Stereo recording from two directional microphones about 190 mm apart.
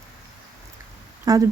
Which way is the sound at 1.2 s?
20° right (ahead or behind).